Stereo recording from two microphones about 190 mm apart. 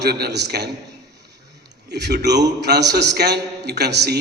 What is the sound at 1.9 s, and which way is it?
A man's voice, 60° right (ahead or behind).